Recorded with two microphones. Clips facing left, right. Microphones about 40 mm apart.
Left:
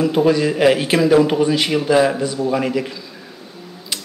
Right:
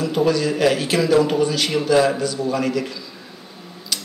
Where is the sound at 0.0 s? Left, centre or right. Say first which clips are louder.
Left 4 dB; left.